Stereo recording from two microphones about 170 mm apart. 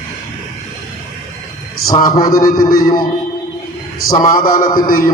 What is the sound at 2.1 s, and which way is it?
Speech, 25° left (ahead or behind).